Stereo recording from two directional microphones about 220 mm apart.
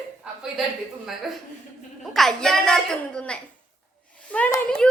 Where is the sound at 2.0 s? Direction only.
Centre (ahead or behind).